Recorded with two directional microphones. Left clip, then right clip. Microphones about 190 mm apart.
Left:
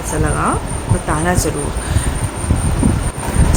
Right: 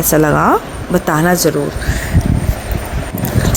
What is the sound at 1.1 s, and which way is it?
Speech, 25° right (ahead or behind).